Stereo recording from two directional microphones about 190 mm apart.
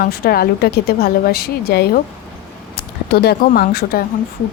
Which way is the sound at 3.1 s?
55° left (ahead or behind).